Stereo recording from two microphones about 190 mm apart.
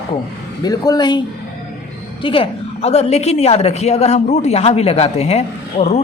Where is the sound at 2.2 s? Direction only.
30° left (ahead or behind).